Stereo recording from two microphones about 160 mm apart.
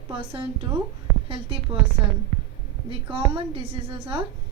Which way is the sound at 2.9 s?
30° right (ahead or behind).